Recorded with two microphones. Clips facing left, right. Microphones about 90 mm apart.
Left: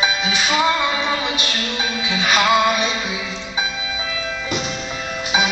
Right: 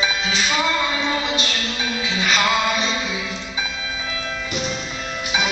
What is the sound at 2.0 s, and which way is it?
Music, 15° left (ahead or behind).